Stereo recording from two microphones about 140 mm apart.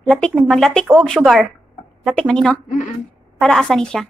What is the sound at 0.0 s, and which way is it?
Speech, 10° left (ahead or behind).